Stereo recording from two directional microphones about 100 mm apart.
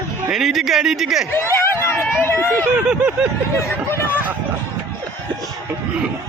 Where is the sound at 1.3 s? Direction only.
25° left (ahead or behind).